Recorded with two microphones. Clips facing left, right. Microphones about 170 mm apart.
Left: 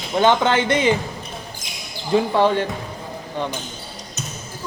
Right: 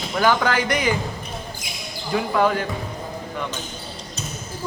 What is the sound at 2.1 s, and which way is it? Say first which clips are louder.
Speech: left 3 dB; 30° left (ahead or behind).